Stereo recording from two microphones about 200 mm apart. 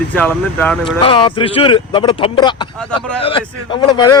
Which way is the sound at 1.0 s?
25° left (ahead or behind).